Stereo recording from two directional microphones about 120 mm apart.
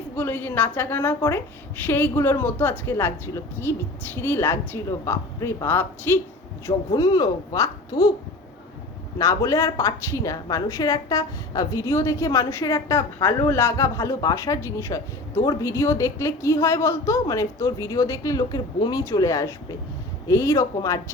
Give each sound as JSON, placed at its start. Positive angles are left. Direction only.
{"t": 0.2, "sound": "a woman's voice", "side_deg": 15}
{"t": 6.9, "sound": "speech", "side_deg": 30}
{"t": 9.1, "sound": "a woman's voice", "side_deg": 30}